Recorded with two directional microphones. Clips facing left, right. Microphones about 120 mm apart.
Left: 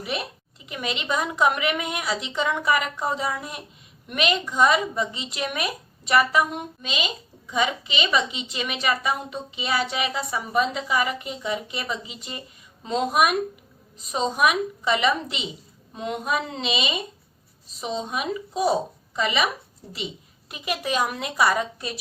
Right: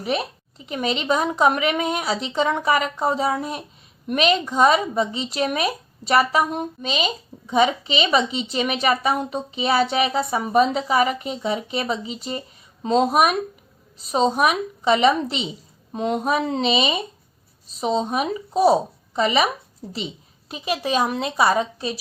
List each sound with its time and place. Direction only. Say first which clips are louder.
0.6 s a woman's voice: right 6 dB; 35° right (ahead or behind)
20.5 s a woman's voice: right 4 dB; 30° right (ahead or behind)